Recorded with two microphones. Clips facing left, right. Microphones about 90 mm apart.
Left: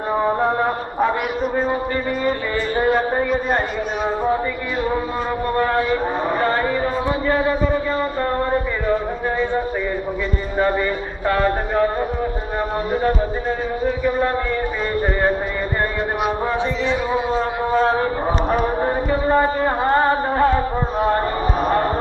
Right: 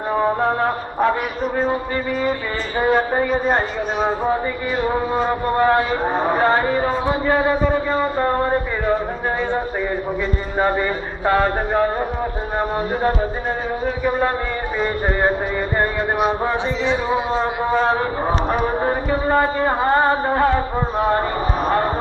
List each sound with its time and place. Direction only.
0.2 s chant: 5° left (ahead or behind)
2.8 s chant: centre (ahead or behind)
3.4 s a man's voice: 20° right (ahead or behind)
5.6 s a man's voice: 20° right (ahead or behind)
10.6 s a man's voice: 20° right (ahead or behind)
16.8 s a man's voice: 20° right (ahead or behind)
17.3 s chant: 5° right (ahead or behind)